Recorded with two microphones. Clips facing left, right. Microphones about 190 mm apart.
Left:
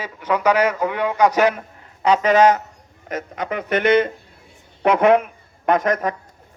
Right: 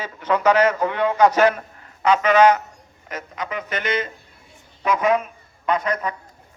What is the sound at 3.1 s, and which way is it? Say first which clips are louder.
A man's voice: left 4 dB; 55° left (ahead or behind).